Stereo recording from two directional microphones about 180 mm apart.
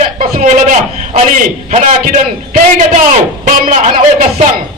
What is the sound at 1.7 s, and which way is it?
A man's voice, 45° right (ahead or behind).